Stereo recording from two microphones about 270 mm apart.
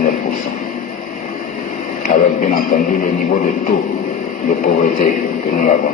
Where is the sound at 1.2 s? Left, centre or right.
Left.